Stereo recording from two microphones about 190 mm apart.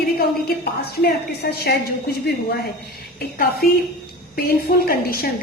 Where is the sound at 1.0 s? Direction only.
55° left (ahead or behind).